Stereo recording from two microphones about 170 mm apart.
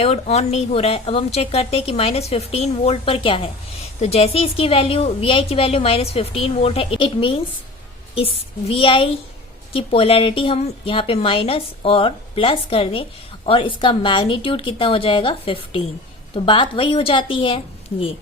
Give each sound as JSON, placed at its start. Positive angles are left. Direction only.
{"t": 0.0, "sound": "a woman's voice", "side_deg": 40}